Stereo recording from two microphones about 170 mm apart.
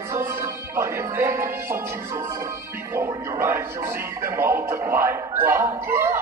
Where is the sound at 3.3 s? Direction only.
15° right (ahead or behind).